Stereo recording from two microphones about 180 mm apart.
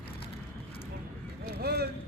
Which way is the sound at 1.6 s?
60° right (ahead or behind).